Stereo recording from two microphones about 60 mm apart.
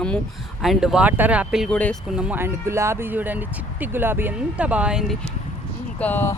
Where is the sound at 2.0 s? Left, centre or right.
Centre.